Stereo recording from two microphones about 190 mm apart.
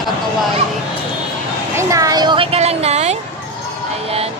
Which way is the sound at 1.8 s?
15° right (ahead or behind).